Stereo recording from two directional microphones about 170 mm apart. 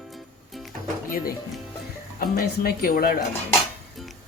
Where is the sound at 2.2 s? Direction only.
60° left (ahead or behind).